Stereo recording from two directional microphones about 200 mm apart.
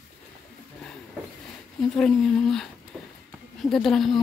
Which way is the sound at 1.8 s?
5° left (ahead or behind).